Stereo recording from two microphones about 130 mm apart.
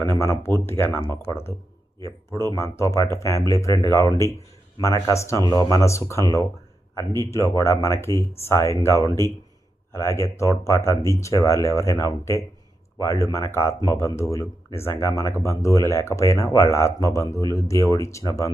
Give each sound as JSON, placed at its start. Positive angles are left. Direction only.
{"t": 0.2, "sound": "speech", "side_deg": 20}